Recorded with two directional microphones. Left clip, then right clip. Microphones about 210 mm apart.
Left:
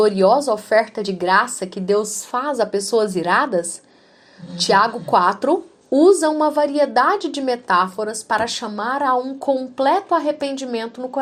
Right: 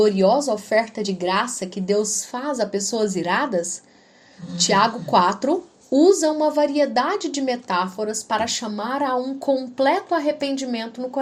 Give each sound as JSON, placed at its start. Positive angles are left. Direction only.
{"t": 0.0, "sound": "a woman's voice", "side_deg": 20}